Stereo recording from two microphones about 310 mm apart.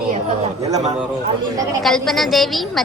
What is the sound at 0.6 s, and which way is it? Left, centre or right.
Speech, centre.